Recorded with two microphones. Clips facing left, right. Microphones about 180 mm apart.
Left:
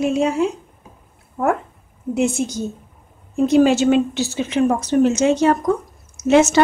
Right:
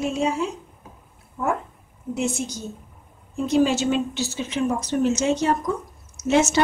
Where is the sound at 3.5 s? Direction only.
65° left (ahead or behind).